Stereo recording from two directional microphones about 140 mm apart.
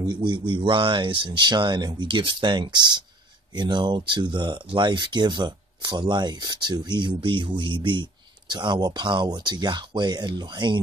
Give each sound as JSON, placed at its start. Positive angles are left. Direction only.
{"t": 0.0, "sound": "speech", "side_deg": -35}